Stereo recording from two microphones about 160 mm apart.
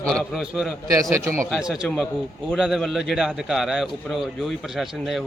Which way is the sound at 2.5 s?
Centre (ahead or behind).